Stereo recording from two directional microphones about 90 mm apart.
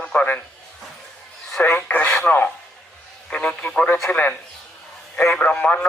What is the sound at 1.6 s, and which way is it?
Radio, 25° left (ahead or behind).